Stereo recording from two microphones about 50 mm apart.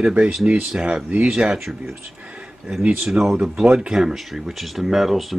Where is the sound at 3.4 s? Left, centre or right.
Centre.